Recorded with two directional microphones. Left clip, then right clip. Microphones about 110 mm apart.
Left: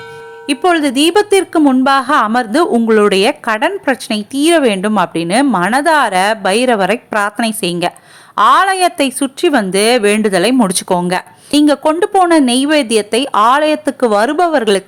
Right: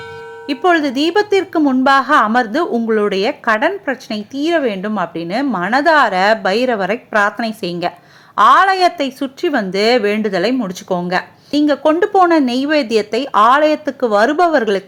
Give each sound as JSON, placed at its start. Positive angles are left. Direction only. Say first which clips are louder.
{"t": 0.4, "sound": "speech", "louder": "left 2 dB", "side_deg": 20}
{"t": 10.6, "sound": "speech", "louder": "left 6 dB", "side_deg": 45}